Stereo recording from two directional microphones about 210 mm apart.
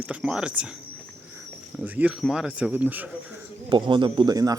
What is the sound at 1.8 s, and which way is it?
Speech, 5° right (ahead or behind).